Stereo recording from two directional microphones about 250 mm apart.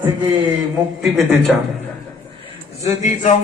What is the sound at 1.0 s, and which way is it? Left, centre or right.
Speech, centre.